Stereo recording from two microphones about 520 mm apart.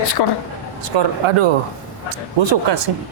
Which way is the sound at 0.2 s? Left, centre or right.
Left.